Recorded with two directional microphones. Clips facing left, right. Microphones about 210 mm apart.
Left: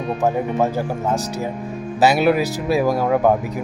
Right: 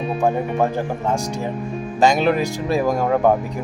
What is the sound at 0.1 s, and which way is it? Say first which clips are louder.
Speech: left 1 dB; 5° left (ahead or behind).